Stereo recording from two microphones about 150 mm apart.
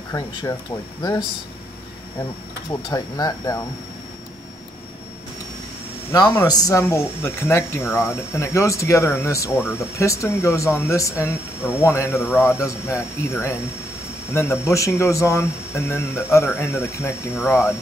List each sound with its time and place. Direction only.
0.1 s speech: 25° left (ahead or behind)
2.7 s speech: 25° left (ahead or behind)
6.4 s speech: 25° left (ahead or behind)